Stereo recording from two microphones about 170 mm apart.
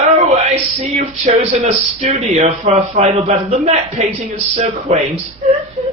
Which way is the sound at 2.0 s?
40° right (ahead or behind).